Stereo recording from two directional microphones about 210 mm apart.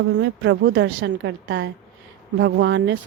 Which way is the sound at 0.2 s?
65° right (ahead or behind).